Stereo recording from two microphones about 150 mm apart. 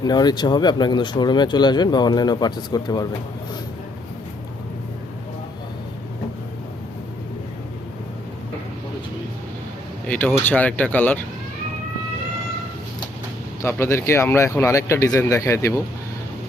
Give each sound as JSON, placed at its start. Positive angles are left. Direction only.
{"t": 0.0, "sound": "speech", "side_deg": 25}
{"t": 10.1, "sound": "speech", "side_deg": 10}
{"t": 13.6, "sound": "speech", "side_deg": 15}